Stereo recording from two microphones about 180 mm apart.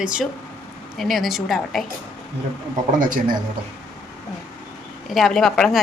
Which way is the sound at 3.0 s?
50° right (ahead or behind).